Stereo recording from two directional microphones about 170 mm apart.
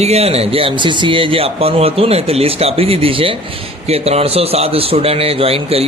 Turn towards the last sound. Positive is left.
turn(degrees=-35)  # may be behind; listen again after turning